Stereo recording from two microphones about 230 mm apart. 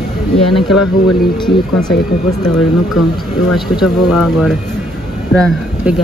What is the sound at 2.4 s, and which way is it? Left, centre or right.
Speech, centre.